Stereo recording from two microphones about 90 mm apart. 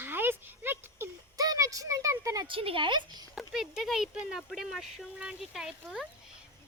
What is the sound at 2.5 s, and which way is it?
Speech, 80° right.